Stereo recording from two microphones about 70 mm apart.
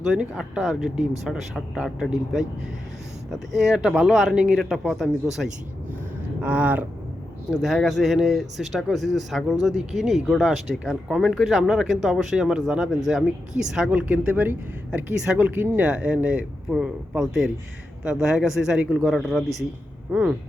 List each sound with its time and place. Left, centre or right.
0.0 s speech: centre
4.4 s speech: centre
4.7 s speech: centre
6.4 s speech: right
7.6 s speech: centre; by 15.8 s right
15.8 s speech: centre
16.6 s speech: centre
19.0 s speech: centre
20.1 s speech: right